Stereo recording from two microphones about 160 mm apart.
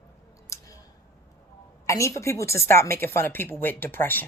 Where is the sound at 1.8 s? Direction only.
20° left (ahead or behind).